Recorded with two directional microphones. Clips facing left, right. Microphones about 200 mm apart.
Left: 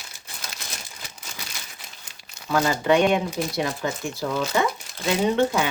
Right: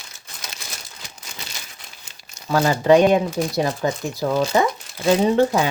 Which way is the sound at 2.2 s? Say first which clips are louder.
Right 3 dB; 40° right (ahead or behind).